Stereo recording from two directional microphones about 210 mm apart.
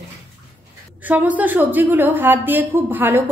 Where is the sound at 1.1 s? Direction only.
5° right (ahead or behind).